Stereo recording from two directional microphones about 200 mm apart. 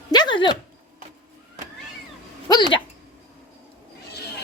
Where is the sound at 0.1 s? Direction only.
20° left (ahead or behind).